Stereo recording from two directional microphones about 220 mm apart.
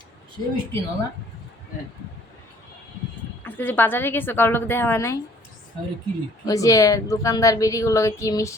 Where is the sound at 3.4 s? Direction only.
10° left (ahead or behind).